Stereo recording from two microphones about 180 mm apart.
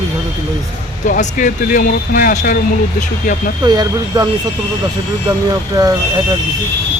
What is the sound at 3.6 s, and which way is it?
Speech, 20° right (ahead or behind).